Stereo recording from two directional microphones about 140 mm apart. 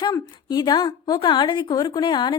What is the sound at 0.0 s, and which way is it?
A woman's voice, 30° left (ahead or behind).